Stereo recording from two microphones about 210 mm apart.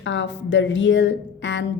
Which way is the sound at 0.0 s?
60° left (ahead or behind).